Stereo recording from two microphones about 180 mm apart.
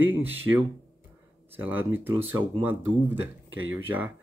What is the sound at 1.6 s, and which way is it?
Speech, 10° right (ahead or behind).